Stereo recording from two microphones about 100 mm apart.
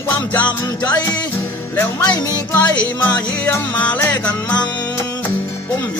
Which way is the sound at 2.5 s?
20° left (ahead or behind).